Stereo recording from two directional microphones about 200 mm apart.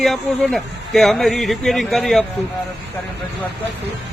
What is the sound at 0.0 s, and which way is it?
A man's voice, centre (ahead or behind).